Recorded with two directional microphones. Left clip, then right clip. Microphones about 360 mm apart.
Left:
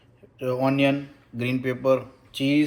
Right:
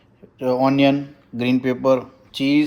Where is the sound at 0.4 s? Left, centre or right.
Right.